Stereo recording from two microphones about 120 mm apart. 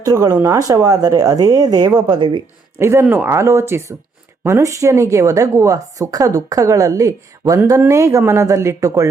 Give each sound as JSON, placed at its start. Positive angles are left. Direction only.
{"t": 0.0, "sound": "a woman's voice", "side_deg": -30}
{"t": 2.7, "sound": "a woman's voice", "side_deg": -20}